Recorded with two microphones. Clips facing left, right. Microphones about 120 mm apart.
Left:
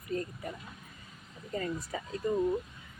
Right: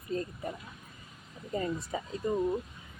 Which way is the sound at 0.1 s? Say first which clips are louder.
Right 1 dB; 25° right (ahead or behind).